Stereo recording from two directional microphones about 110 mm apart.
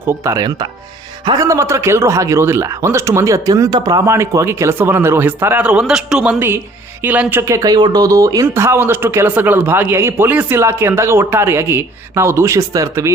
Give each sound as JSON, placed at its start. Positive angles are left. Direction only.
{"t": 0.0, "sound": "speech", "side_deg": -20}
{"t": 0.3, "sound": "speech", "side_deg": -40}
{"t": 1.4, "sound": "speech", "side_deg": -30}
{"t": 4.0, "sound": "a man's voice", "side_deg": -25}